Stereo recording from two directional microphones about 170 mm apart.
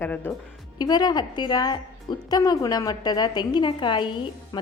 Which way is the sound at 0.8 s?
25° left (ahead or behind).